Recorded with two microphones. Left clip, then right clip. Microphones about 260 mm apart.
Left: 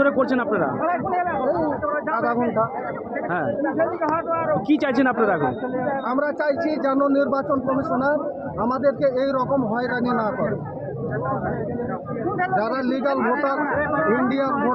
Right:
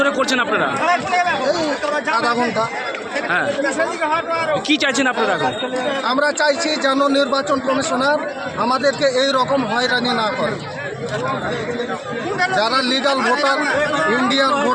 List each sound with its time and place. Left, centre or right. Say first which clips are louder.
0.0 s speech: right 3 dB; centre
0.9 s chatter: right 6 dB; right
2.2 s a man's voice: right 3 dB; right
3.8 s speech: right 3 dB; right
4.7 s speech: right 3 dB; centre
6.1 s a man's voice: right 7 dB; centre
12.5 s a man's voice: right 6 dB; centre
13.7 s speech: right 4 dB; right
14.3 s a man's voice: right 6 dB; centre